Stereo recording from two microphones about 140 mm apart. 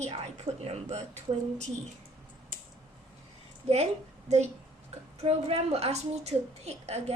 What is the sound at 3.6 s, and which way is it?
A woman's voice, 50° right (ahead or behind).